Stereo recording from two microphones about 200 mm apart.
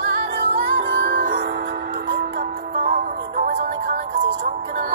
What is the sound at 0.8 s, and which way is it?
Music, 65° right (ahead or behind).